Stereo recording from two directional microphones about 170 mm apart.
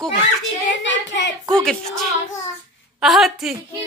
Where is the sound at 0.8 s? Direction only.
90° left.